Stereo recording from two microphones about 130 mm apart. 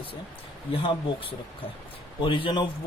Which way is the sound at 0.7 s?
45° left (ahead or behind).